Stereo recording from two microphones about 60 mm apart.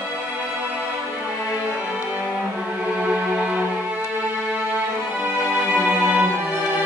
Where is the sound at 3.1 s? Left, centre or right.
Centre.